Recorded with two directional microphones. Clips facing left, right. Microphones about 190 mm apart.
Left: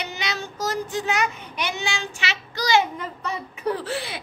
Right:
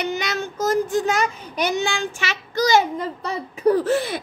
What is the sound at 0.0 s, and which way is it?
Child singing, 50° right (ahead or behind).